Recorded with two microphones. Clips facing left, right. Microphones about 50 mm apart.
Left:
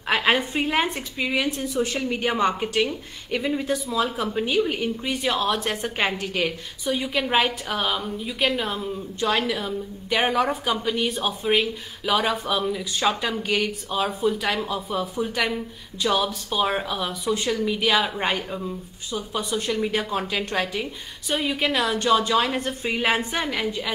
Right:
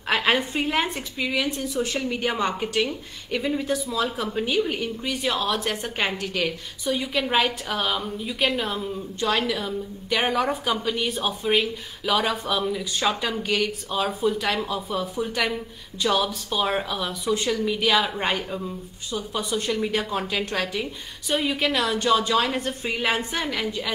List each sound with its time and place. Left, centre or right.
0.6 s speech: centre
1.4 s a woman's voice: left
1.9 s speech: centre
5.0 s a woman's voice: left
6.2 s speech: centre